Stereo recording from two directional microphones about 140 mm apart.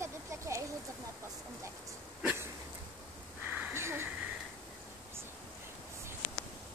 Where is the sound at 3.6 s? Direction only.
15° right (ahead or behind).